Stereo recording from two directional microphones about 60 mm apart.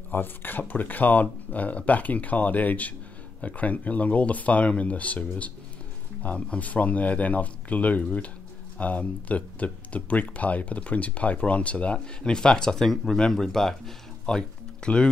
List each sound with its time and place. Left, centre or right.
0.1 s speech: left; by 15.0 s centre